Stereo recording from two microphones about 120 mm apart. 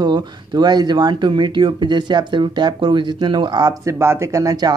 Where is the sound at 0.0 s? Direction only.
35° right (ahead or behind).